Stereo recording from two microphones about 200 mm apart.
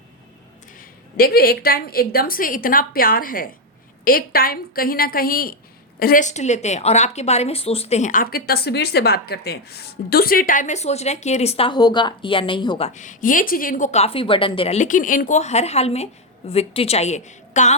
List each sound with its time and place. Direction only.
0.8 s a woman's voice: 50° left (ahead or behind); by 12.9 s 25° left (ahead or behind)
12.9 s a woman's voice: 40° left (ahead or behind)